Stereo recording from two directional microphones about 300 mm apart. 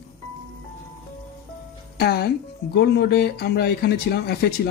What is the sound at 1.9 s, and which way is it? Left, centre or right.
Speech, left.